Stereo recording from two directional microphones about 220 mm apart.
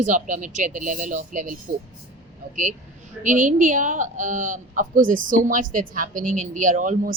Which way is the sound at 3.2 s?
35° right (ahead or behind).